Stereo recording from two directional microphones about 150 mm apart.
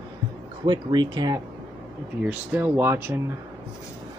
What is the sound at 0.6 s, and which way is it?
Speech, 30° right (ahead or behind).